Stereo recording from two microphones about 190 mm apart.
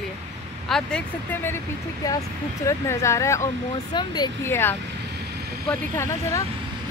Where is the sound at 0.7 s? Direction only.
5° left (ahead or behind).